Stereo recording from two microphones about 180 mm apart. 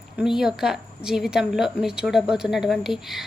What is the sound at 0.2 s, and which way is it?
A woman's voice, centre (ahead or behind).